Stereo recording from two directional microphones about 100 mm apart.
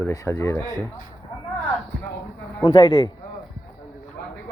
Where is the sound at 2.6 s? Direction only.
55° left (ahead or behind).